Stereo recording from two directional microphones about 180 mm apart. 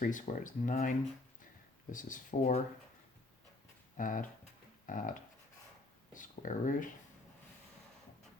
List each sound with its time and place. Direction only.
0.0 s speech: 45° left (ahead or behind)
3.9 s speech: 50° left (ahead or behind)
6.1 s speech: 45° left (ahead or behind)